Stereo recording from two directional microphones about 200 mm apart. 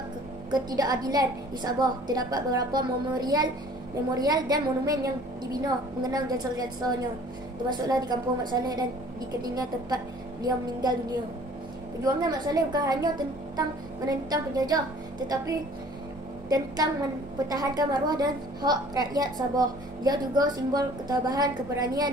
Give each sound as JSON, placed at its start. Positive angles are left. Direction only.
{"t": 0.5, "sound": "a woman's voice", "side_deg": -20}
{"t": 7.7, "sound": "a woman's voice", "side_deg": -20}
{"t": 16.4, "sound": "a woman's voice", "side_deg": -20}